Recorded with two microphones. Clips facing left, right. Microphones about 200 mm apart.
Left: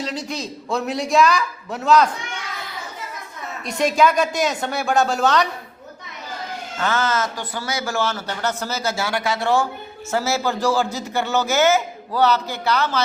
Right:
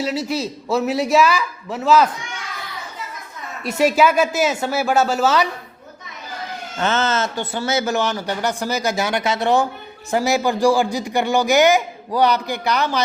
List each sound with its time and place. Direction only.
0.0 s a man's voice: 5° right (ahead or behind)
3.6 s speech: 5° right (ahead or behind)
6.7 s a man's voice: 25° right (ahead or behind)